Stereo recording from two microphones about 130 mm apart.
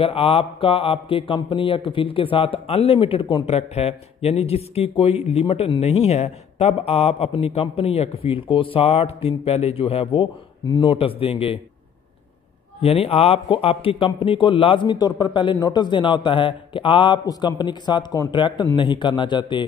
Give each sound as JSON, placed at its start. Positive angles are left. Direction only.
{"t": 0.0, "sound": "speech", "side_deg": 45}
{"t": 3.5, "sound": "speech", "side_deg": 55}
{"t": 10.2, "sound": "speech", "side_deg": 35}
{"t": 12.8, "sound": "a man's voice", "side_deg": 50}